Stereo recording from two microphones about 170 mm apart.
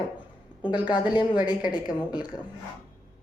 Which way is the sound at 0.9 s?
25° left (ahead or behind).